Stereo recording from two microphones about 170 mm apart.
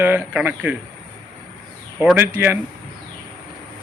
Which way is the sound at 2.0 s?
5° right (ahead or behind).